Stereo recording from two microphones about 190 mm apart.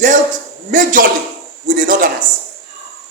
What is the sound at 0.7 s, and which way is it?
A man's voice, 45° right (ahead or behind).